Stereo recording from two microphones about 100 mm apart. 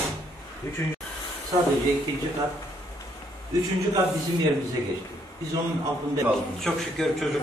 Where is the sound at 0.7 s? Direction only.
30° left (ahead or behind).